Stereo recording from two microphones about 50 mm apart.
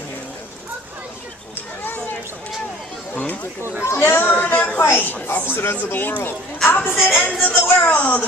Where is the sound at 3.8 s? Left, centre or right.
Left.